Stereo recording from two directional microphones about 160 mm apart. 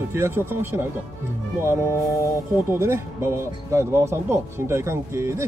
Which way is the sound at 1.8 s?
20° left (ahead or behind).